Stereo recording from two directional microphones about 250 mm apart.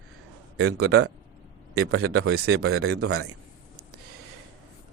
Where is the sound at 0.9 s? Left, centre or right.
Right.